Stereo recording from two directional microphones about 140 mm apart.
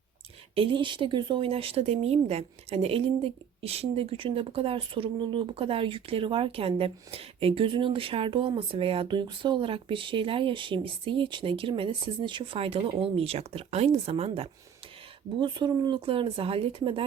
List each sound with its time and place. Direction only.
0.5 s speech: 40° right (ahead or behind)
15.4 s speech: 35° right (ahead or behind)